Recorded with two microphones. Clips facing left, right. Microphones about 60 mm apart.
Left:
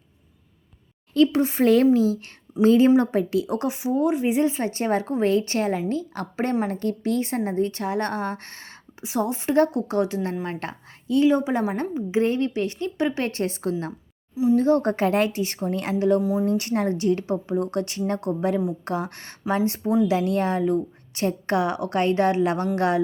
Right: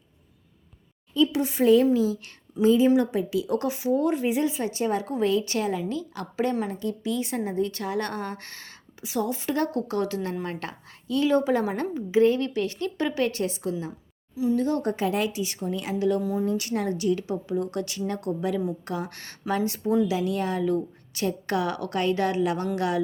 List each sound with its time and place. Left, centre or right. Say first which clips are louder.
1.3 s a woman's voice: left 4 dB; left
1.6 s a woman's voice: left 1 dB; left
3.4 s speech: even; left
4.3 s a woman's voice: left 3 dB; left
6.7 s a woman's voice: left 4 dB; left
11.3 s a woman's voice: right 2 dB; centre
11.8 s a woman's voice: right 2 dB; left
14.5 s a woman's voice: left 6 dB; left
16.2 s a woman's voice: left 4 dB; centre
16.5 s a woman's voice: left 4 dB; left